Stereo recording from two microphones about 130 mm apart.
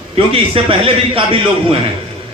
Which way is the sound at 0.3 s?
45° right (ahead or behind).